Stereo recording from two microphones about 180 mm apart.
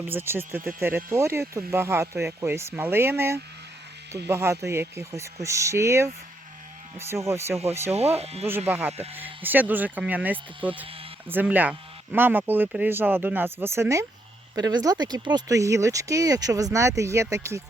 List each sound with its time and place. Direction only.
0.0 s speech: 10° right (ahead or behind)
7.9 s speech: 35° right (ahead or behind)
8.4 s speech: 10° right (ahead or behind)